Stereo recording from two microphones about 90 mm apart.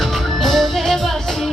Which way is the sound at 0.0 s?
Centre (ahead or behind).